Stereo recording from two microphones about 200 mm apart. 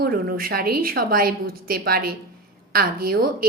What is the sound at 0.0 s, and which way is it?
A woman's voice, 50° right (ahead or behind).